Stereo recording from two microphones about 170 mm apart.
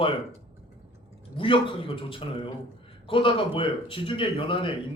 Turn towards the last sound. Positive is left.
turn(degrees=30)  # may be behind; listen again after turning